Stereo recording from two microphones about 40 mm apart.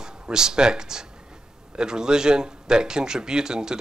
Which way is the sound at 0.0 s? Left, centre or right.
Centre.